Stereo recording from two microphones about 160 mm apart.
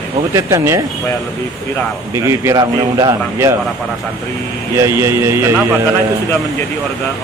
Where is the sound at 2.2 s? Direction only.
15° right (ahead or behind).